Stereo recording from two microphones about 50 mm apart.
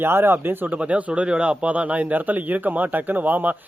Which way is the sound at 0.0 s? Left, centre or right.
Right.